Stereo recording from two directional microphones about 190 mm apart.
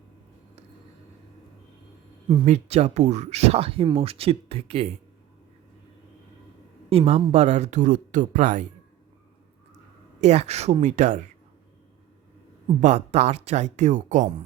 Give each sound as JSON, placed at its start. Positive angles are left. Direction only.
{"t": 2.2, "sound": "speech", "side_deg": -30}
{"t": 6.9, "sound": "speech", "side_deg": -30}
{"t": 10.2, "sound": "speech", "side_deg": -35}
{"t": 12.8, "sound": "speech", "side_deg": -35}